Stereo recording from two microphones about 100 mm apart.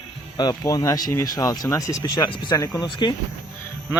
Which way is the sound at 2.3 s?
55° left (ahead or behind).